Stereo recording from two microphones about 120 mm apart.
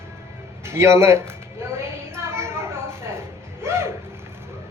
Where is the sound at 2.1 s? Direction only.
20° right (ahead or behind).